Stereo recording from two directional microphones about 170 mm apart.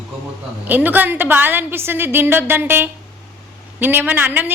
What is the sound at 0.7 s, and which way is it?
A woman's voice, 10° right (ahead or behind).